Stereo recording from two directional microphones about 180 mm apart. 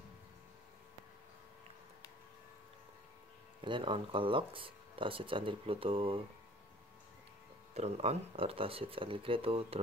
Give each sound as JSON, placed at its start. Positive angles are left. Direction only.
{"t": 3.6, "sound": "speech", "side_deg": -25}
{"t": 7.7, "sound": "speech", "side_deg": -35}